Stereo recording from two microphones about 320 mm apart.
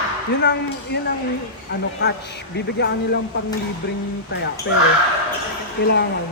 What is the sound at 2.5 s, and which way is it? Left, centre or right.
Speech, left.